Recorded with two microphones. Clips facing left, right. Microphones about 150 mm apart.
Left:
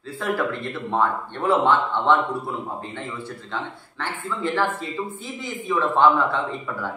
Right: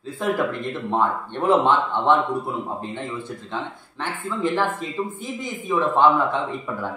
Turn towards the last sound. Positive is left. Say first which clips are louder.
# right 1 dB
turn(degrees=-15)  # may be behind; listen again after turning